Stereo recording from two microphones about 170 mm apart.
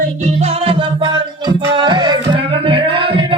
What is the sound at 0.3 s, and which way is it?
Music, 35° right (ahead or behind).